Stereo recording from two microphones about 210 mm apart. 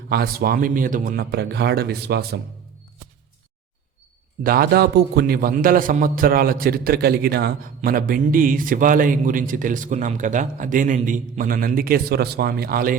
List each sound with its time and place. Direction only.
0.1 s a man's voice: 45° right (ahead or behind)
4.4 s a man's voice: 45° right (ahead or behind)